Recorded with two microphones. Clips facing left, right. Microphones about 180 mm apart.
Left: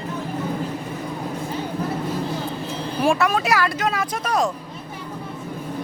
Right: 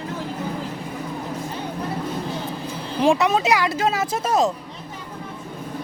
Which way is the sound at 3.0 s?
20° right (ahead or behind).